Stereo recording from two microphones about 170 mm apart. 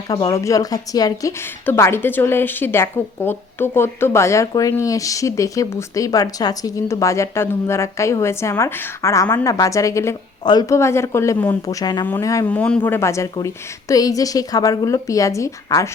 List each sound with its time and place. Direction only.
0.1 s a woman's voice: 30° left (ahead or behind)
0.3 s a woman's voice: 20° left (ahead or behind)
12.5 s a woman's voice: 5° left (ahead or behind)